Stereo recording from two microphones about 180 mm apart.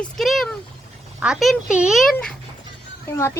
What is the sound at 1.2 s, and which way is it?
Speech, centre (ahead or behind).